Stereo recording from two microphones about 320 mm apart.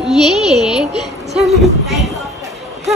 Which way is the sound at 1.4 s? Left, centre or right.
Centre.